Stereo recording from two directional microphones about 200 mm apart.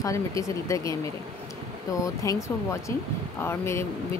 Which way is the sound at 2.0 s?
15° left (ahead or behind).